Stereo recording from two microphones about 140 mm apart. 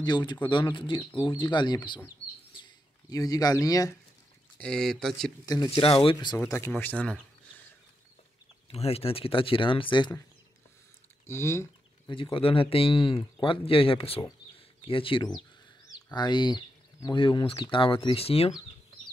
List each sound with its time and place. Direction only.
0.0 s speech: 30° left (ahead or behind)
2.5 s bird: 30° left (ahead or behind)
4.6 s speech: 5° left (ahead or behind)
5.4 s speech: 25° left (ahead or behind)
5.9 s speech: 40° left (ahead or behind)
6.3 s speech: 20° left (ahead or behind)
8.6 s speech: 45° left (ahead or behind)
11.2 s speech: 20° left (ahead or behind)
12.1 s speech: 40° left (ahead or behind)